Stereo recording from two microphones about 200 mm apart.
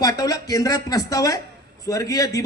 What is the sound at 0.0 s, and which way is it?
A man's voice, 15° left (ahead or behind).